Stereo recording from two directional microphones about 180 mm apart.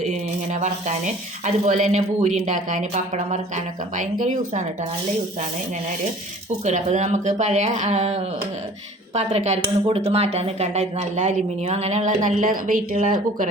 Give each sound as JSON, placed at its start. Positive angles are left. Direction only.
{"t": 0.0, "sound": "speech", "side_deg": -40}
{"t": 6.7, "sound": "speech", "side_deg": -40}